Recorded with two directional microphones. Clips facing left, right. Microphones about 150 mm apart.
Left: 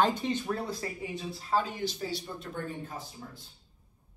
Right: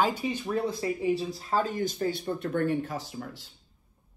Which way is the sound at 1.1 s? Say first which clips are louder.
Right 1 dB; 35° right (ahead or behind).